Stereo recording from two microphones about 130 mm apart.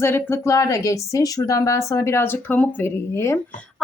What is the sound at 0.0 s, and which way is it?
Speech, 20° left (ahead or behind).